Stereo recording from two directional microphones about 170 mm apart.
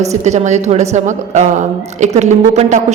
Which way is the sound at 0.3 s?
45° right (ahead or behind).